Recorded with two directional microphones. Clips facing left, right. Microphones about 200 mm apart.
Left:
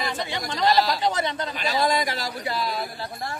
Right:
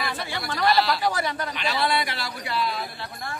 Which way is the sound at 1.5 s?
40° left (ahead or behind).